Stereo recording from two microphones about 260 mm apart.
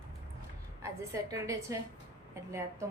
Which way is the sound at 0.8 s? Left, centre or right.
Centre.